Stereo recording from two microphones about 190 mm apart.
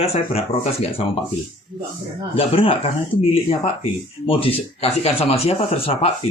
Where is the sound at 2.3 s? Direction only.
30° left (ahead or behind).